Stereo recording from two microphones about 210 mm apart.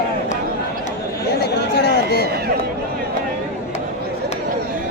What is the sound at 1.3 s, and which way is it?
Chatter, 50° left (ahead or behind).